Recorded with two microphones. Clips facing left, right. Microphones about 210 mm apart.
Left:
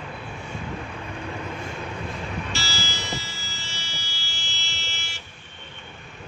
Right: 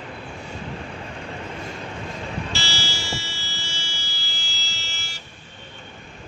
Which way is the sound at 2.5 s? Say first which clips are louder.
Right 1 dB; 30° right (ahead or behind).